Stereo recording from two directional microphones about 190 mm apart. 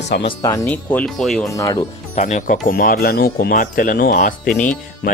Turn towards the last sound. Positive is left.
turn(degrees=40)  # may be behind; listen again after turning